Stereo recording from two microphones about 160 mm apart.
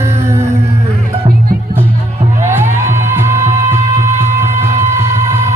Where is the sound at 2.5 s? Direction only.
15° right (ahead or behind).